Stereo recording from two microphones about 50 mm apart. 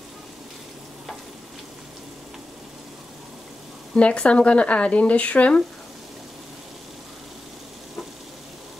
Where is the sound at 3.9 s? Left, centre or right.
Left.